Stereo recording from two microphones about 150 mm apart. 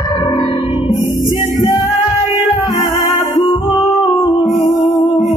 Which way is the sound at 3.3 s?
35° left (ahead or behind).